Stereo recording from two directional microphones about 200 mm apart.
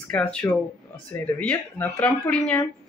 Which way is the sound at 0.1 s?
5° left (ahead or behind).